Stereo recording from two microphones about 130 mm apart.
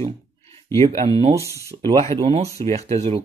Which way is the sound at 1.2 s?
50° right (ahead or behind).